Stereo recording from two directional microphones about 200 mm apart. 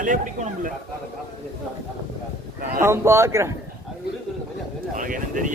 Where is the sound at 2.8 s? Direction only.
15° right (ahead or behind).